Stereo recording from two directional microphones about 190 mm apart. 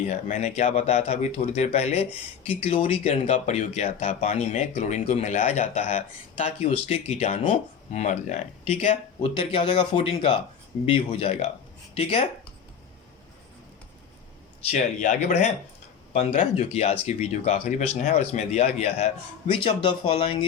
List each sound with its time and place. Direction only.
0.1 s speech: 35° left (ahead or behind)
14.7 s speech: 40° left (ahead or behind)